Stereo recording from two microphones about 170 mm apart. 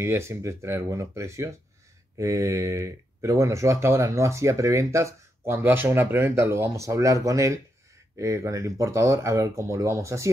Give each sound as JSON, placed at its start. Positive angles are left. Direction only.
{"t": 0.0, "sound": "speech", "side_deg": -15}